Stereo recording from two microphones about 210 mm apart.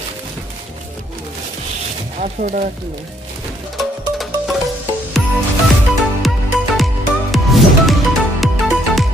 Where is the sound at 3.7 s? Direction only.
Centre (ahead or behind).